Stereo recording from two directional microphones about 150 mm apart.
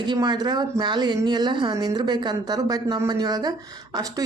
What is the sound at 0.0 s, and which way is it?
Speech, 30° right (ahead or behind).